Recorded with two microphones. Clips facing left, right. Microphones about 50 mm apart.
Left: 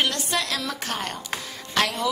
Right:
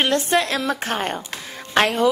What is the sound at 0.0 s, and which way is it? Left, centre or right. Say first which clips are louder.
A woman's voice: right 6 dB; right.